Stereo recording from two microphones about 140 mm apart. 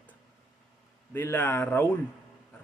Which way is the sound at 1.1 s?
15° left (ahead or behind).